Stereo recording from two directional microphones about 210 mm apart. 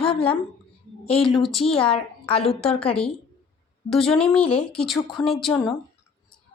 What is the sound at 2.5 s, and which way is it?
A woman's voice, 5° left (ahead or behind).